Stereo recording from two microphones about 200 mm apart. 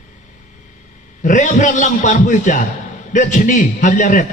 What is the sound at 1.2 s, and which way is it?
A man's voice, 40° left (ahead or behind).